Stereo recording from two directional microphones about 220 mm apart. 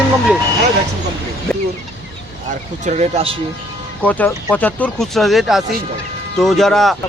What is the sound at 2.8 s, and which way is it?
Speech, 30° right (ahead or behind).